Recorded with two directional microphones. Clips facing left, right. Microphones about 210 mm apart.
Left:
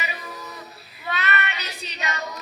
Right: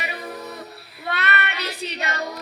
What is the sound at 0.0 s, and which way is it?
Music, 60° right (ahead or behind).